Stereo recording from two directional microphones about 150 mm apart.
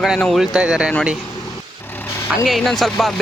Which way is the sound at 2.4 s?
Centre (ahead or behind).